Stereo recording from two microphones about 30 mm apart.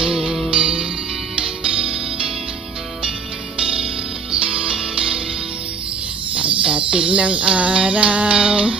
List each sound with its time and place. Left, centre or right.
0.0 s music: right
3.5 s music: right
6.3 s music: right